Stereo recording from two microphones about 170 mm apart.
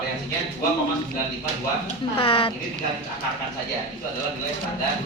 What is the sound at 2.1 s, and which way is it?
Speech, 30° left (ahead or behind).